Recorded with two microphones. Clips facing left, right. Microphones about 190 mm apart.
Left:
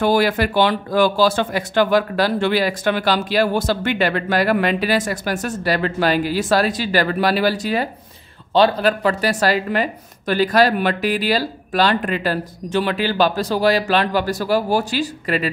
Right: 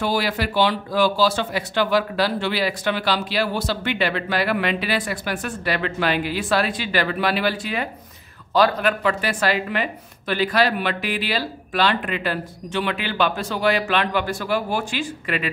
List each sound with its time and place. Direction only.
0.0 s a woman's voice: 50° left (ahead or behind)